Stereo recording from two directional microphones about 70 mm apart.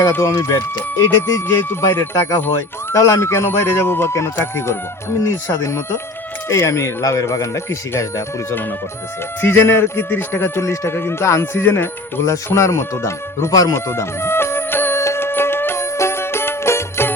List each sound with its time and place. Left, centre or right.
0.2 s speech: left
13.5 s speech: left
13.7 s music: left